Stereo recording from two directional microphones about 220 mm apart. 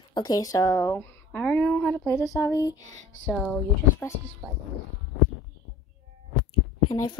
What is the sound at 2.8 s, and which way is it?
Speech, 60° left (ahead or behind).